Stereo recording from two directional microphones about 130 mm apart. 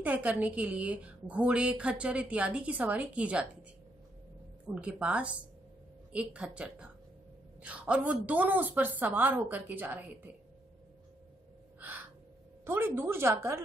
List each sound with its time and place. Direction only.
0.0 s a woman's voice: 10° right (ahead or behind)
4.7 s a woman's voice: 10° right (ahead or behind)
11.8 s crow: 15° right (ahead or behind)
12.6 s speech: 15° right (ahead or behind)